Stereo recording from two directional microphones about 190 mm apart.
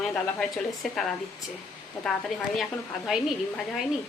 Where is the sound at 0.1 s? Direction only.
Centre (ahead or behind).